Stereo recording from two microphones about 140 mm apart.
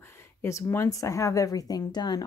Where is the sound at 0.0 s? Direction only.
20° left (ahead or behind).